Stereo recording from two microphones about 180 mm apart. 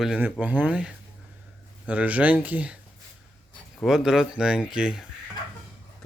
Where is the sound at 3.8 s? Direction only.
Centre (ahead or behind).